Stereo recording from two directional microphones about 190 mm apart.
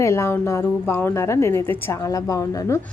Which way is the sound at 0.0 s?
15° left (ahead or behind).